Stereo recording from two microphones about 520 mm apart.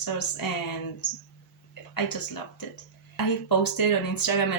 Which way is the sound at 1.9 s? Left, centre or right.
Left.